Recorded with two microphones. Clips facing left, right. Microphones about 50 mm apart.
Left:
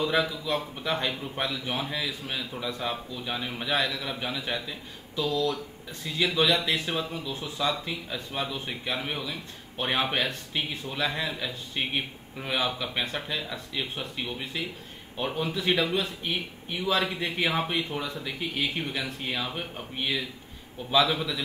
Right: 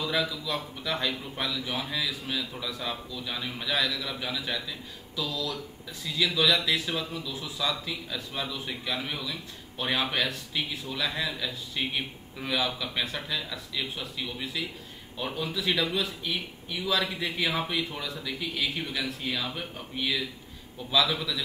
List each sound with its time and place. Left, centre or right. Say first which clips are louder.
0.0 s a man's voice: left 3 dB; left